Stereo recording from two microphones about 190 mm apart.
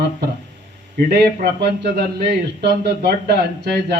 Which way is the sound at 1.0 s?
55° right (ahead or behind).